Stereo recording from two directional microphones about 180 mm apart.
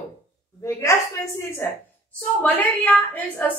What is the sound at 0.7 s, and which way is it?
A woman's voice, 15° left (ahead or behind).